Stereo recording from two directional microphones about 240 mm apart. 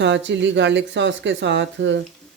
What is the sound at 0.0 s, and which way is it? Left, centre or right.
Speech, right.